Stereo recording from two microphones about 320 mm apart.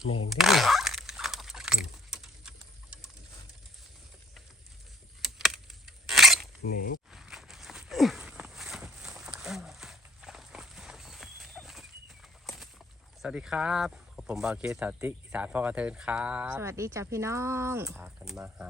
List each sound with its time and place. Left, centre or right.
0.3 s keys jangling: centre
5.2 s keys jangling: centre
6.6 s speech: left
7.1 s walk: centre
13.2 s speech: centre